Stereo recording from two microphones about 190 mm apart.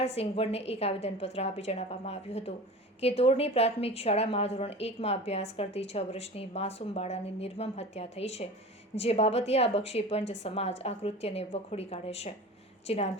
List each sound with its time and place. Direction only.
0.0 s a woman's voice: 30° left (ahead or behind)